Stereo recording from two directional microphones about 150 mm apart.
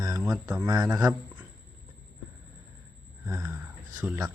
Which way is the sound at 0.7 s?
25° right (ahead or behind).